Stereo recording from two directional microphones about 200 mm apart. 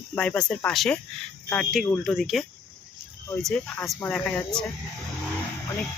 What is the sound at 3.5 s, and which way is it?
Speech, 5° left (ahead or behind).